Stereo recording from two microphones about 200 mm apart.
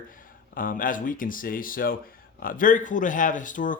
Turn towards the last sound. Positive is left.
turn(degrees=40)  # may be behind; listen again after turning